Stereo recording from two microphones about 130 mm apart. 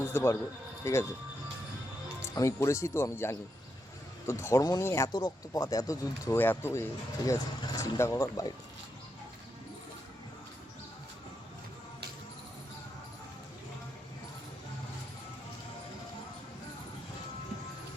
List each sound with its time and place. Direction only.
0.1 s a man's voice: 20° left (ahead or behind)
2.2 s speech: 25° left (ahead or behind)
7.3 s speech: 30° left (ahead or behind)